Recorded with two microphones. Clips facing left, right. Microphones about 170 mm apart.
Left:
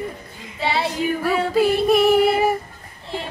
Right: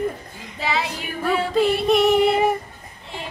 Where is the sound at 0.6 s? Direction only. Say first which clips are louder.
Left 2 dB; 30° left (ahead or behind).